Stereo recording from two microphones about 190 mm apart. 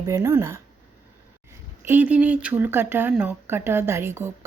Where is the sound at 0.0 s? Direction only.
15° right (ahead or behind).